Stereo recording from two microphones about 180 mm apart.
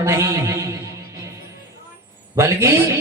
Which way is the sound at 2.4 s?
15° right (ahead or behind).